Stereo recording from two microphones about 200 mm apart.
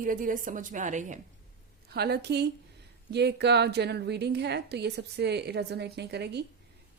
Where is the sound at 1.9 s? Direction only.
55° right (ahead or behind).